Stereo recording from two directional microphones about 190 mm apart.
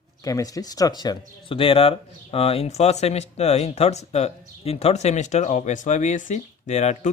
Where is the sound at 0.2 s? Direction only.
20° left (ahead or behind).